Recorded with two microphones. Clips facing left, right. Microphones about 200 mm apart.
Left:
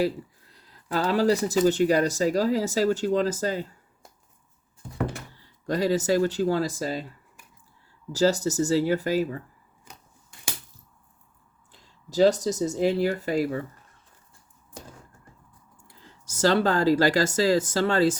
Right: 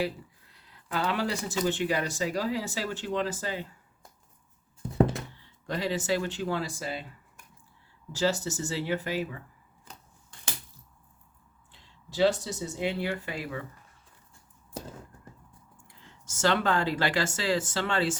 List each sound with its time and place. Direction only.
0.0 s speech: 40° left (ahead or behind)
5.3 s speech: 40° left (ahead or behind)
9.9 s scissors: 10° left (ahead or behind)
11.7 s speech: 45° left (ahead or behind)
15.9 s speech: 35° left (ahead or behind)